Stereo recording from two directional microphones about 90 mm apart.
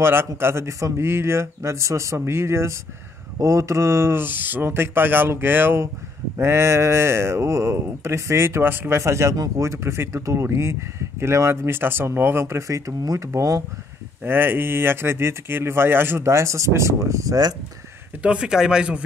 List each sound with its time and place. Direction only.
0.0 s speech: 25° right (ahead or behind)
14.2 s speech: 25° right (ahead or behind); by 17.6 s 45° right (ahead or behind)
18.2 s speech: 10° right (ahead or behind)